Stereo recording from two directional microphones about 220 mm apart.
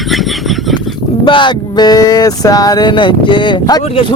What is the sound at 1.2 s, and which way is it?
Speech, 20° left (ahead or behind).